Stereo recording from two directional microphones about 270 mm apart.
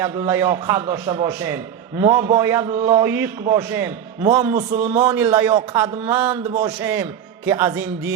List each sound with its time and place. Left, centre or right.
0.0 s a man's voice: centre
4.5 s a man's voice: right
4.9 s a man's voice: centre